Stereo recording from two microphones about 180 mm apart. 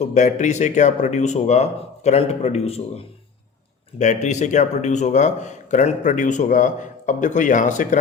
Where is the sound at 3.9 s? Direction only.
40° left (ahead or behind).